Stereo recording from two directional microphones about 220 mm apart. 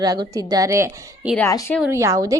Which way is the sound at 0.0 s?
20° right (ahead or behind).